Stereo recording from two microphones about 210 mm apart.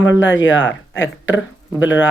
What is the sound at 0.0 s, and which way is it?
Speech, 65° left (ahead or behind).